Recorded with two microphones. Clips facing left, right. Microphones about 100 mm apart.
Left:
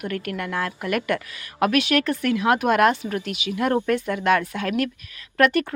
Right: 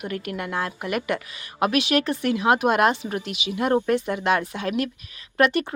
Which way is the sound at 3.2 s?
45° left (ahead or behind).